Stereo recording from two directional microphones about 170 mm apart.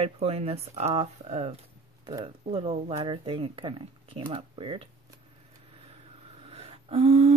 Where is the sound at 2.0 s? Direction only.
25° right (ahead or behind).